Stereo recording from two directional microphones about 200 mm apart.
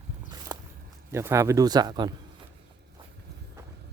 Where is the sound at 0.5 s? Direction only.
20° right (ahead or behind).